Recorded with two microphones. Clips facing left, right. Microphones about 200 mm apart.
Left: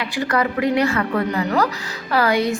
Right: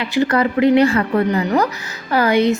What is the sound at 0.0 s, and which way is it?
A woman's voice, 25° right (ahead or behind).